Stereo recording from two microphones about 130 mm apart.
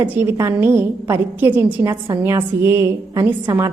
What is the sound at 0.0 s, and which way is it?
A woman's voice, 15° right (ahead or behind).